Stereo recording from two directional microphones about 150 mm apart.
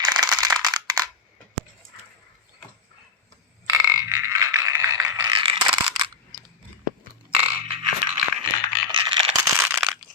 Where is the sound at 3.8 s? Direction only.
20° right (ahead or behind).